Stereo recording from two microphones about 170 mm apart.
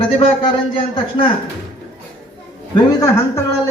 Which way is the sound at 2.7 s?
20° left (ahead or behind).